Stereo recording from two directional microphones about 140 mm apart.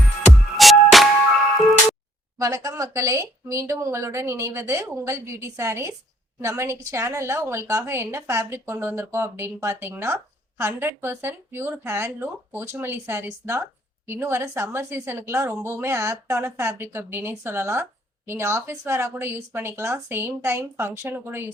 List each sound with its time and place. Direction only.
0.5 s music: centre (ahead or behind)
2.4 s a woman's voice: 25° right (ahead or behind)